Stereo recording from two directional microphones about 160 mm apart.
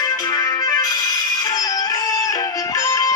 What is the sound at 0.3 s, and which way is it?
Music, 25° left (ahead or behind).